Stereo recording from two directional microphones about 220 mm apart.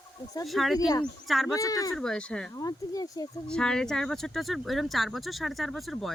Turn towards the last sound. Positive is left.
turn(degrees=0)  # may be behind; listen again after turning